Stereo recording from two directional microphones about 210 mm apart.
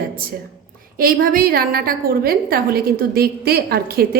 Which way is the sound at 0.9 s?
45° right (ahead or behind).